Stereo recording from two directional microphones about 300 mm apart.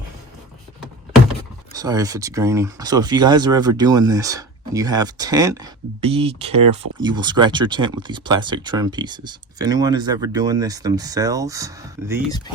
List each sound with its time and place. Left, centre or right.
1.7 s speech: centre